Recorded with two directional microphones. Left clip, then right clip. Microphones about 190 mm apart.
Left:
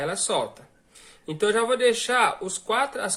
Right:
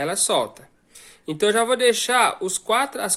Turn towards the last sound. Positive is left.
turn(degrees=-50)  # may be behind; listen again after turning